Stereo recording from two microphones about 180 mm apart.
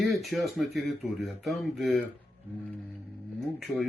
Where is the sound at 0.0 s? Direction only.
Centre (ahead or behind).